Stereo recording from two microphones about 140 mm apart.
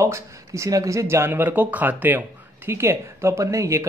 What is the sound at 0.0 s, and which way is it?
Speech, 20° right (ahead or behind).